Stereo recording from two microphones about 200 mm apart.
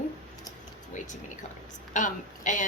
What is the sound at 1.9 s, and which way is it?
Speech, 40° left (ahead or behind).